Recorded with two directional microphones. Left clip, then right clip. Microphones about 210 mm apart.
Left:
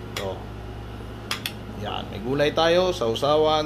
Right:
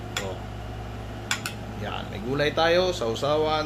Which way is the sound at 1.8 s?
15° left (ahead or behind).